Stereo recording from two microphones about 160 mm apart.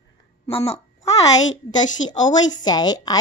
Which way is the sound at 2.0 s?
25° left (ahead or behind).